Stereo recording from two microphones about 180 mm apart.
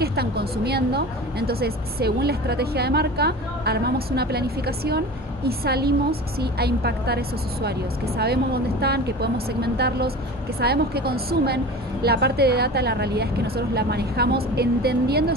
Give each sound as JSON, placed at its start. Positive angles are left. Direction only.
{"t": 0.0, "sound": "a woman's voice", "side_deg": -60}
{"t": 8.8, "sound": "a woman's voice", "side_deg": -65}